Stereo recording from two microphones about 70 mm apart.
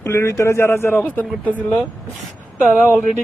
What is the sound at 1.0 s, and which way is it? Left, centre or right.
Speech, left.